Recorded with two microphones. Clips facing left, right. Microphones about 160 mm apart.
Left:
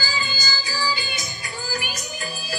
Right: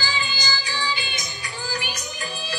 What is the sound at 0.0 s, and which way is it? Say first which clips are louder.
Music: right 1 dB; 35° left (ahead or behind).